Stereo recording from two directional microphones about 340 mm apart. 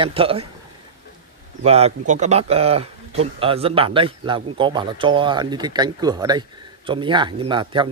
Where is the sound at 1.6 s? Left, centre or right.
Centre.